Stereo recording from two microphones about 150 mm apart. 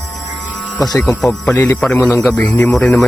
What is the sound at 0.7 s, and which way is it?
Speech, 25° left (ahead or behind).